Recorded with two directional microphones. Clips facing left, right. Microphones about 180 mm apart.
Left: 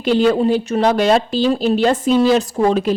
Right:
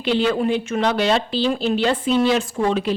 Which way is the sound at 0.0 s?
45° left (ahead or behind).